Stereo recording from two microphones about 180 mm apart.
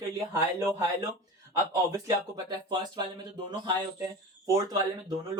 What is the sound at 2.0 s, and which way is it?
Speech, 25° right (ahead or behind).